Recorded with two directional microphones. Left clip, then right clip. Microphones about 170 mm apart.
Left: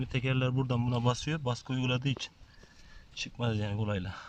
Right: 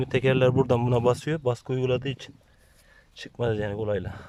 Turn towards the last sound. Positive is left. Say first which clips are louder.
# right 8 dB
turn(degrees=-45)  # may be behind; listen again after turning